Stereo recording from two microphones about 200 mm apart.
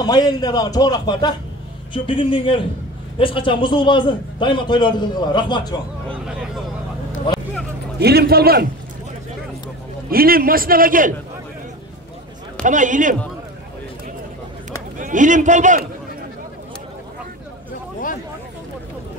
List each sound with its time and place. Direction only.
0.0 s a man's voice: 20° left (ahead or behind)
8.0 s a man's voice: 55° right (ahead or behind)
10.0 s a man's voice: 45° right (ahead or behind)
12.6 s a man's voice: 40° right (ahead or behind)
15.0 s a man's voice: 40° right (ahead or behind)